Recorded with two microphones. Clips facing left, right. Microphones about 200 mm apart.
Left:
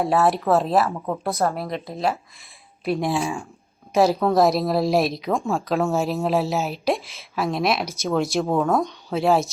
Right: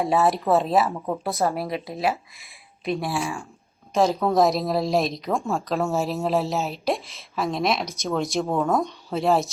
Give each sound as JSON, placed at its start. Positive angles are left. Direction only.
{"t": 0.0, "sound": "a woman's voice", "side_deg": 0}
{"t": 2.9, "sound": "speech", "side_deg": 20}
{"t": 3.9, "sound": "a woman's voice", "side_deg": 5}